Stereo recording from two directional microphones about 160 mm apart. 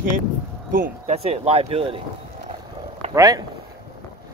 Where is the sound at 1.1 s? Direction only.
40° right (ahead or behind).